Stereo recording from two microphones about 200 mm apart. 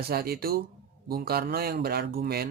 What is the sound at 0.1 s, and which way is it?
Speech, 50° right (ahead or behind).